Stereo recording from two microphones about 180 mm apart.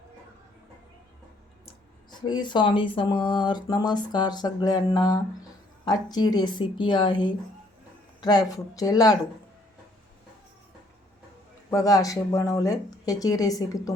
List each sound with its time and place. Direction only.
2.0 s speech: 25° left (ahead or behind)
11.7 s speech: 20° left (ahead or behind)